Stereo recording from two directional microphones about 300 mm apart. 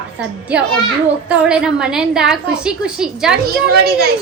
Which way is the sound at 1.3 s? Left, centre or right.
Centre.